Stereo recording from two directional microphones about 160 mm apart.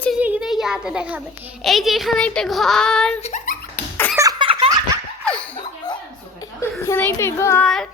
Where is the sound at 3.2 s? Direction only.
55° left (ahead or behind).